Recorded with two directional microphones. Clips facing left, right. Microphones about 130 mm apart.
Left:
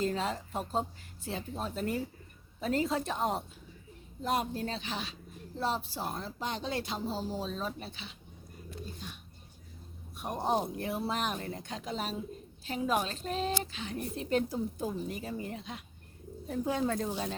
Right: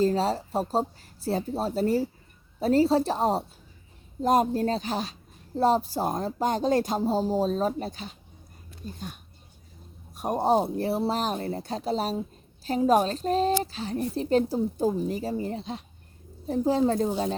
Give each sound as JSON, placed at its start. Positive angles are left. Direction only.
{"t": 0.0, "sound": "a woman's voice", "side_deg": -35}
{"t": 10.2, "sound": "a woman's voice", "side_deg": -40}